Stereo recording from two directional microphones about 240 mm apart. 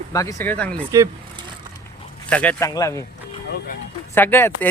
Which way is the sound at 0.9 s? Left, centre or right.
Centre.